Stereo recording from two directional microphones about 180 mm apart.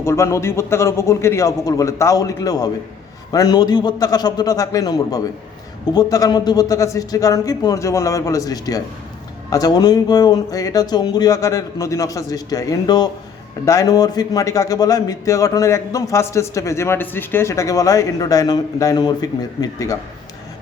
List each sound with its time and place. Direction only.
0.0 s a man's voice: 15° left (ahead or behind)